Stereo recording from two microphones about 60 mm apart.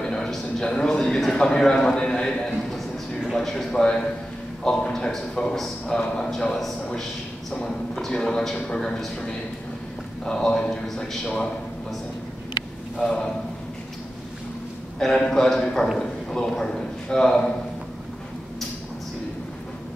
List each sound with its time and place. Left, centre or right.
0.0 s a man's voice: centre
12.9 s a man's voice: centre
15.0 s a man's voice: centre